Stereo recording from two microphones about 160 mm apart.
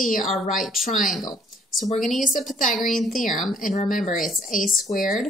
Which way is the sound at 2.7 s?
Centre (ahead or behind).